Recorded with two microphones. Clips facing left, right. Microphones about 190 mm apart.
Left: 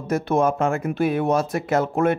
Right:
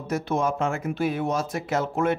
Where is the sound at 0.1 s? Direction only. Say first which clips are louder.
Left 5 dB; 55° left (ahead or behind).